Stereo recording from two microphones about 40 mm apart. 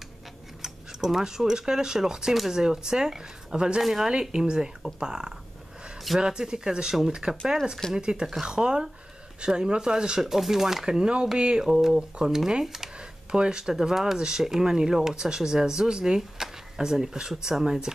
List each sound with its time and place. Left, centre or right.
0.6 s speech: centre
3.8 s speech: centre
13.3 s speech: right